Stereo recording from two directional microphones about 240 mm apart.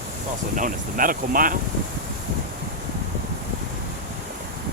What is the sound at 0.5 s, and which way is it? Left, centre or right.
Speech, right.